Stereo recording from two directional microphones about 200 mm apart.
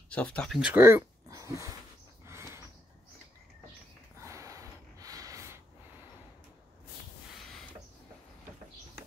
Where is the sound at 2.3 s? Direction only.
15° right (ahead or behind).